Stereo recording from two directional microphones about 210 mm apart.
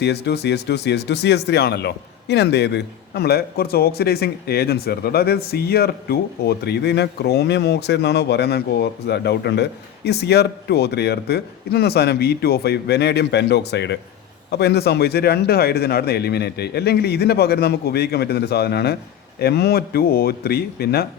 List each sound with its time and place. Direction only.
0.0 s speech: 50° left (ahead or behind)